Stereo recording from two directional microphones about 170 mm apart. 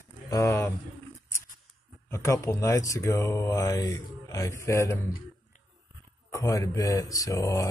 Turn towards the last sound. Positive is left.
turn(degrees=15)  # may be behind; listen again after turning